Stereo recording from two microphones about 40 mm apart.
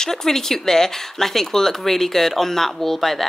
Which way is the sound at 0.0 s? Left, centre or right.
Centre.